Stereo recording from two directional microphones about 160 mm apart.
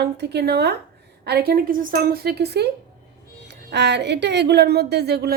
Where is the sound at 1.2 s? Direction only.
75° right (ahead or behind).